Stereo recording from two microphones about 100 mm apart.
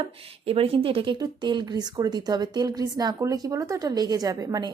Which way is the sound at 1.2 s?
50° right (ahead or behind).